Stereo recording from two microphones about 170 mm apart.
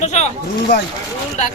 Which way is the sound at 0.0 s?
45° left (ahead or behind).